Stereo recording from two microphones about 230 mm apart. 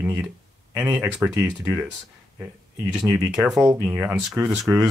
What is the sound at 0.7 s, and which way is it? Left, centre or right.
Speech, centre.